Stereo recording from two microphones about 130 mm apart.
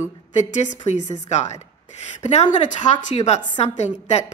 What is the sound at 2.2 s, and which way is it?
A woman's voice, 65° left (ahead or behind).